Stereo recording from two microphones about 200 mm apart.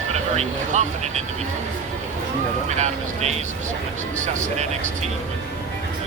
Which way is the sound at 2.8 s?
35° right (ahead or behind).